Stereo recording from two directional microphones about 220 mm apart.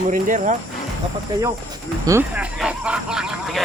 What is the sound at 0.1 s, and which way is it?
Speech, 35° right (ahead or behind).